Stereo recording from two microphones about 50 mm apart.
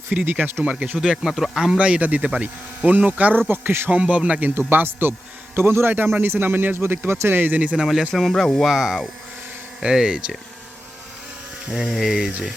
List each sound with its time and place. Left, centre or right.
0.3 s speech: right
0.6 s speech: right
0.9 s speech: centre
1.8 s speech: right
3.3 s speech: right
3.8 s speech: right
4.4 s speech: right
7.5 s speech: right
7.8 s speech: centre
8.1 s speech: centre
8.6 s speech: centre
11.7 s speech: centre